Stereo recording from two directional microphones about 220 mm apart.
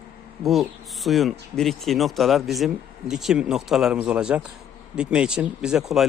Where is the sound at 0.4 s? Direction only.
Centre (ahead or behind).